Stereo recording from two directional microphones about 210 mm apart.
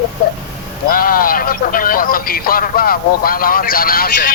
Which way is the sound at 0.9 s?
45° left (ahead or behind).